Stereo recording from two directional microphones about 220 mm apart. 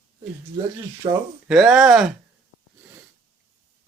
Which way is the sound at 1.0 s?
20° right (ahead or behind).